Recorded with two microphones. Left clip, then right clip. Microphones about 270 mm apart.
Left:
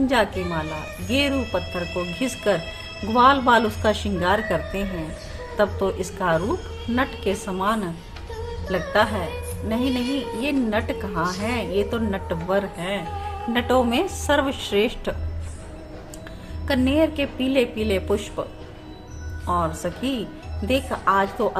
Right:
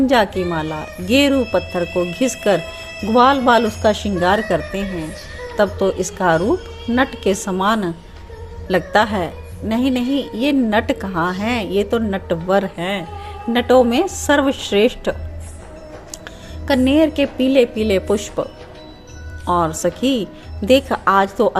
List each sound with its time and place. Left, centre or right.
0.1 s a woman's voice: right
16.6 s a woman's voice: right
19.5 s a woman's voice: right